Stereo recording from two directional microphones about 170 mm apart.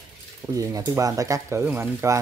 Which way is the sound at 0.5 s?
20° right (ahead or behind).